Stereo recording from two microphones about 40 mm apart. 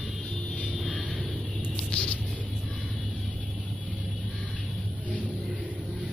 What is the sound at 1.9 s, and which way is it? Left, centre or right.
Music, left.